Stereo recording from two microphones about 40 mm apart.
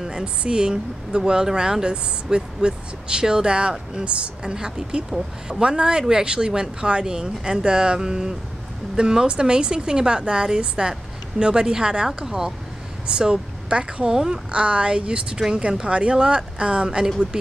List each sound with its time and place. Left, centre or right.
0.0 s a sound: centre
0.4 s speech: right
4.4 s a woman's voice: centre
14.1 s a woman's voice: centre
14.5 s speech: right